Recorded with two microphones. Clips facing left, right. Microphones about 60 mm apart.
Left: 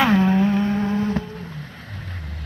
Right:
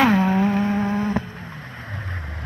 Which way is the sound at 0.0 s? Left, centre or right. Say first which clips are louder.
Even; centre.